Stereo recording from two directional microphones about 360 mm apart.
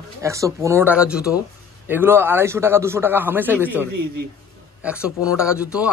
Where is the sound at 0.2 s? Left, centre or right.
Centre.